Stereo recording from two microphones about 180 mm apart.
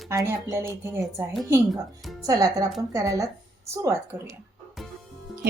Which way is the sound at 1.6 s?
Centre (ahead or behind).